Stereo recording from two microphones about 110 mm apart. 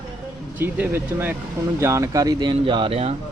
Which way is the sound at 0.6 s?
20° right (ahead or behind).